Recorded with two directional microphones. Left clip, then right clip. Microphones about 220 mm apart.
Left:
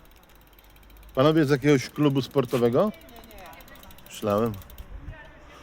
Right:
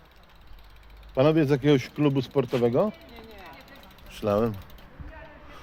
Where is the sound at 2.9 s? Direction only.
45° left (ahead or behind).